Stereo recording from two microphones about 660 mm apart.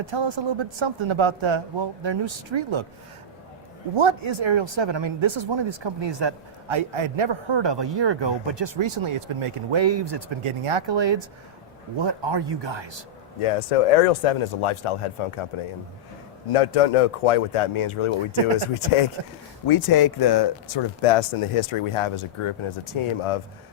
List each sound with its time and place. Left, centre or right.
0.0 s speech: right
3.9 s speech: right
13.4 s speech: left
16.5 s speech: left
19.2 s speech: right
19.6 s speech: left
21.0 s speech: left